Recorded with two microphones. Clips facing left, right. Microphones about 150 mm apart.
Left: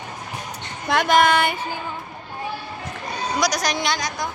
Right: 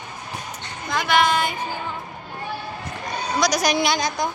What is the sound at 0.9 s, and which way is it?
Speech, 75° left (ahead or behind).